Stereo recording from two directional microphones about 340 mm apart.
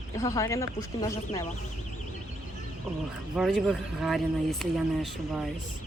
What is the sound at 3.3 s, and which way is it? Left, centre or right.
Speech, centre.